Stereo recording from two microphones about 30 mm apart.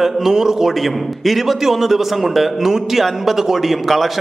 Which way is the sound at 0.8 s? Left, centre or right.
Centre.